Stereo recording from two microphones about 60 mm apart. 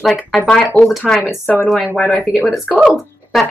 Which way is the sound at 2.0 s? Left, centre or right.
Centre.